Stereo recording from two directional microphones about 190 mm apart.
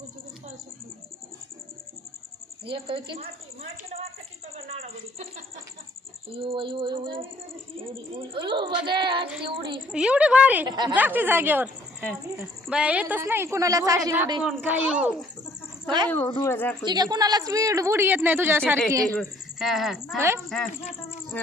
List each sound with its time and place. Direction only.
2.6 s speech: 30° right (ahead or behind)
3.8 s a sound: 35° right (ahead or behind)
6.2 s speech: 30° right (ahead or behind)
8.3 s speech: 25° right (ahead or behind)
9.9 s speech: 5° right (ahead or behind)
10.7 s speech: 25° right (ahead or behind)
10.9 s a woman's voice: 10° right (ahead or behind)
16.0 s speech: 10° left (ahead or behind)
16.8 s a woman's voice: 20° right (ahead or behind)
19.1 s speech: centre (ahead or behind)
20.1 s a woman's voice: 15° right (ahead or behind)